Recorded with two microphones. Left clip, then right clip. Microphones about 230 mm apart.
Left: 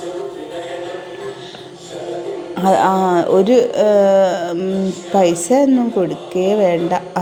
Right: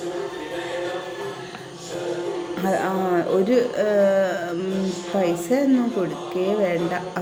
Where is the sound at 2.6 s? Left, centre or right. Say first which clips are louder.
Left 11 dB; left.